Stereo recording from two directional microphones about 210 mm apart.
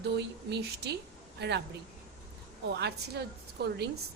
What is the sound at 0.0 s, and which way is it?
Speech, 55° right (ahead or behind).